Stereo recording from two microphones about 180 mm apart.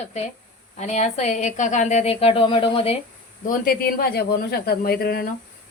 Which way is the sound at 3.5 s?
55° left (ahead or behind).